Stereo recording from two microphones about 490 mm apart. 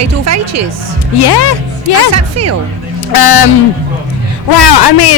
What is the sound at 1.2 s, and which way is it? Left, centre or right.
Speech, left.